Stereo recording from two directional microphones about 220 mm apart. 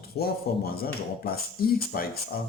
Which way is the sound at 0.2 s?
45° left (ahead or behind).